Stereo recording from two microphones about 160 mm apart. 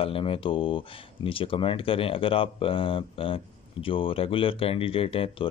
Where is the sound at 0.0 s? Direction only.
35° left (ahead or behind).